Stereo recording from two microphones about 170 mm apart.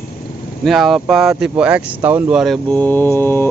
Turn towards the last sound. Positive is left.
turn(degrees=15)  # may be behind; listen again after turning